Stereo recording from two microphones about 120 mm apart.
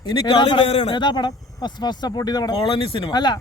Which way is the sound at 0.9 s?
40° left (ahead or behind).